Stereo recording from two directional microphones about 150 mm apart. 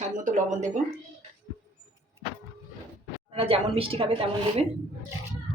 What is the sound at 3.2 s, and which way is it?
A woman's voice, 40° right (ahead or behind).